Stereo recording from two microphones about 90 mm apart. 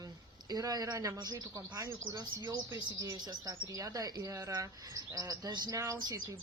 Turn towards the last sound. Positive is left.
turn(degrees=-40)  # may be behind; listen again after turning